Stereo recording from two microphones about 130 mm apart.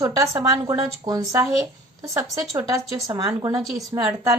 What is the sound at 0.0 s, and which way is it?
A woman's voice, 25° right (ahead or behind).